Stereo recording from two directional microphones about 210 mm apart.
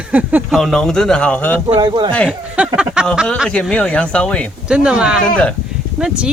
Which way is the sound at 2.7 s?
5° right (ahead or behind).